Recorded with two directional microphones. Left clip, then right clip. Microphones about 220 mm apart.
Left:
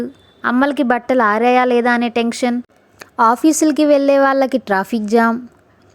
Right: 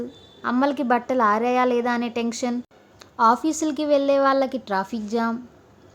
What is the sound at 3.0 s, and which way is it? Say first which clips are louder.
Speech: left 5 dB; 35° left (ahead or behind).